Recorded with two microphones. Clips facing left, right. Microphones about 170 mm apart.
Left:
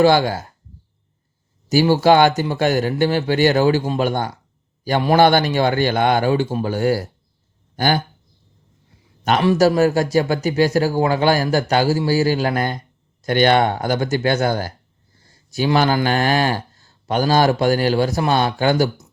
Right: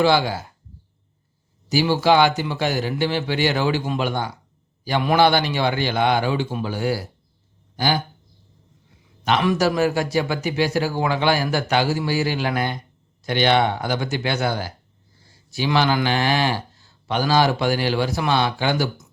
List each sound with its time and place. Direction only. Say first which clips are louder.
0.0 s speech: left 4 dB; 50° left (ahead or behind)
1.7 s speech: left 4 dB; 45° left (ahead or behind)
9.4 s speech: left 6 dB; 35° left (ahead or behind)